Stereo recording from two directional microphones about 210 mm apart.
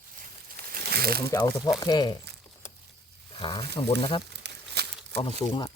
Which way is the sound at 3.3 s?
25° left (ahead or behind).